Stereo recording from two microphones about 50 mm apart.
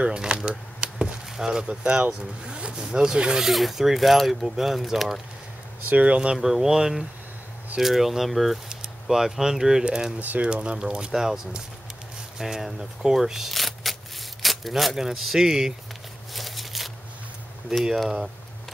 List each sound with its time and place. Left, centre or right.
0.0 s speech: centre
0.4 s a sound: centre
2.8 s speech: centre
3.5 s speech: centre
5.9 s speech: right
6.3 s speech: centre
16.3 s a sound: centre